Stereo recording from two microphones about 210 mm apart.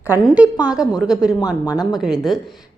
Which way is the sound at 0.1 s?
5° right (ahead or behind).